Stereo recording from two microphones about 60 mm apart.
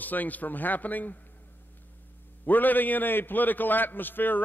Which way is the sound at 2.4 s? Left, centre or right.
Left.